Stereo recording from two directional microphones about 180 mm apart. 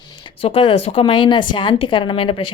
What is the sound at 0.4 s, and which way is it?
Speech, 30° left (ahead or behind).